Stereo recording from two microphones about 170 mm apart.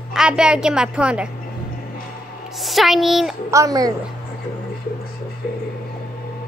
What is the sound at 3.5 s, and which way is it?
Speech, 20° right (ahead or behind).